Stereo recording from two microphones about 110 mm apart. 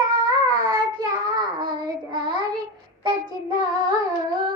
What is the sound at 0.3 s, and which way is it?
Child singing, 45° right (ahead or behind).